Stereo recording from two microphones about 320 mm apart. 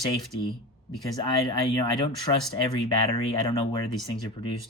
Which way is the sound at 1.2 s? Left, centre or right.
Centre.